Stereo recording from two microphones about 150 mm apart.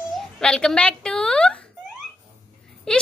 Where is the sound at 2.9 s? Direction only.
5° left (ahead or behind).